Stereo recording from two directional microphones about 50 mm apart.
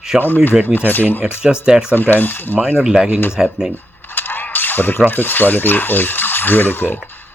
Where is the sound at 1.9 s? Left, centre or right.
Left.